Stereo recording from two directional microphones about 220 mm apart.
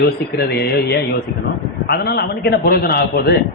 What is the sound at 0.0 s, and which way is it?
Speech, 45° left (ahead or behind).